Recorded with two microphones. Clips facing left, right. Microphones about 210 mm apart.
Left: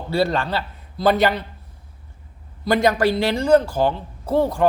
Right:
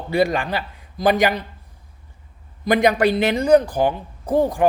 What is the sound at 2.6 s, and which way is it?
Speech, 15° right (ahead or behind).